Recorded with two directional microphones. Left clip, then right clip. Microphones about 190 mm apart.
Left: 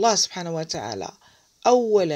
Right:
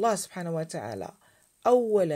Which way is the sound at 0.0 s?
15° left (ahead or behind).